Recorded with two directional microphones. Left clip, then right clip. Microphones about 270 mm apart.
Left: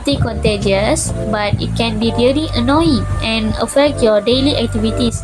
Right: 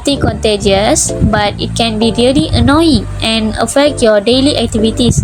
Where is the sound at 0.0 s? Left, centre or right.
Centre.